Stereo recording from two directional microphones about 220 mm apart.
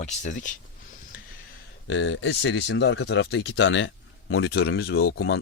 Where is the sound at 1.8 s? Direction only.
55° left (ahead or behind).